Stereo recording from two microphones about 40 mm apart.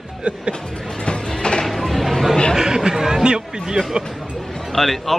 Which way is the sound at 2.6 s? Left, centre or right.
Centre.